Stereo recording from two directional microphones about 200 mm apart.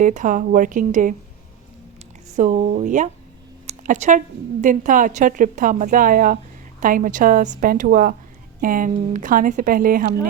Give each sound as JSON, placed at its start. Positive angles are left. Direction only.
{"t": 0.0, "sound": "a woman's voice", "side_deg": -40}
{"t": 2.3, "sound": "a woman's voice", "side_deg": -35}
{"t": 3.7, "sound": "a sound", "side_deg": -35}
{"t": 4.6, "sound": "a woman's voice", "side_deg": -40}